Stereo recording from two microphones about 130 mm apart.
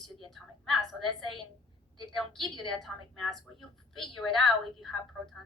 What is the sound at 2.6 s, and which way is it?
A woman's voice, centre (ahead or behind).